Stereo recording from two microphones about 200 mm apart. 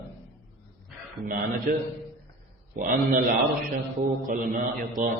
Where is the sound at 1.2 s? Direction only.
45° right (ahead or behind).